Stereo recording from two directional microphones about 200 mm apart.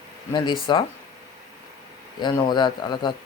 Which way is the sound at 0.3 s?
25° left (ahead or behind).